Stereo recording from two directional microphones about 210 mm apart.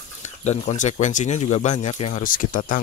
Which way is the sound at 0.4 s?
35° left (ahead or behind).